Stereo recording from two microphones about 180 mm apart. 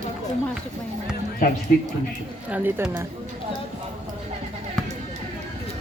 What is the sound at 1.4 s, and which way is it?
Speech, 50° left (ahead or behind).